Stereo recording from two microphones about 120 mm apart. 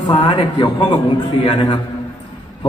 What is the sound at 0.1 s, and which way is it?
Speech, 40° left (ahead or behind).